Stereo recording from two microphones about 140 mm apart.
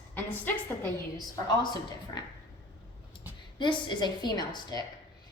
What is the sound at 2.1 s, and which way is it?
Speech, 30° left (ahead or behind).